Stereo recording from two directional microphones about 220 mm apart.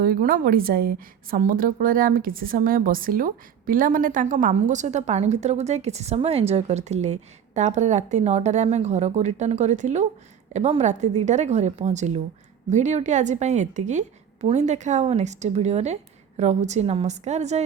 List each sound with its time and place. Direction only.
0.0 s a woman's voice: 40° right (ahead or behind)